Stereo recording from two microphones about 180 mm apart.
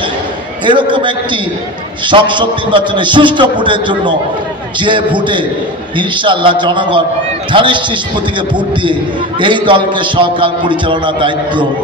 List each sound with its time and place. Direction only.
0.7 s a man's voice: 25° right (ahead or behind)
9.4 s a man's voice: 25° right (ahead or behind)